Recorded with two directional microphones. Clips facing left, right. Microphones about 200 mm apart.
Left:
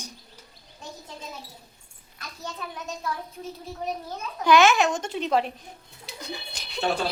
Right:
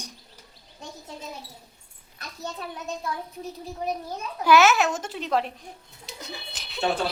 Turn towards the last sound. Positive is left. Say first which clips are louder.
# even
turn(degrees=0)  # may be behind; listen again after turning